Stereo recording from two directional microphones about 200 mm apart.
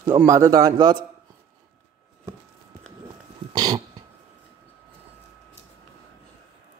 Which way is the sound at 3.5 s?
20° right (ahead or behind).